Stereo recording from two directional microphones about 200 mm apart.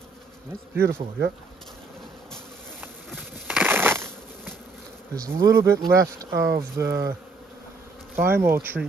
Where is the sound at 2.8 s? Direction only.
5° right (ahead or behind).